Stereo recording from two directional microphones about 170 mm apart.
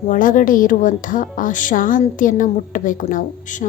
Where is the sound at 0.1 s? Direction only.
50° left (ahead or behind).